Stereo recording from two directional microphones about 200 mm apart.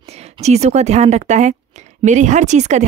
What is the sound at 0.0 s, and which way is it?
A woman's voice, 30° right (ahead or behind).